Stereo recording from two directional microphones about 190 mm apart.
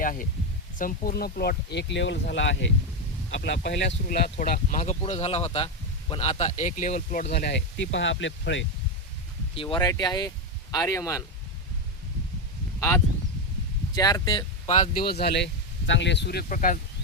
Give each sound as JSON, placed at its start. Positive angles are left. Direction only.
{"t": 0.0, "sound": "speech", "side_deg": 45}
{"t": 4.0, "sound": "speech", "side_deg": 50}
{"t": 7.3, "sound": "speech", "side_deg": 65}
{"t": 9.6, "sound": "speech", "side_deg": 25}
{"t": 13.9, "sound": "speech", "side_deg": 20}
{"t": 15.0, "sound": "speech", "side_deg": 55}